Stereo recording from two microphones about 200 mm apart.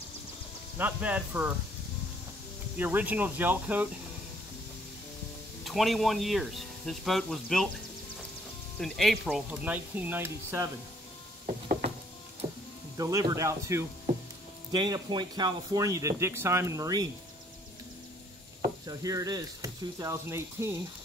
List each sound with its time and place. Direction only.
0.7 s speech: 10° right (ahead or behind)
2.8 s speech: 10° right (ahead or behind)
5.6 s speech: centre (ahead or behind)
8.7 s speech: centre (ahead or behind)
12.9 s speech: 15° right (ahead or behind)
18.9 s speech: 15° right (ahead or behind)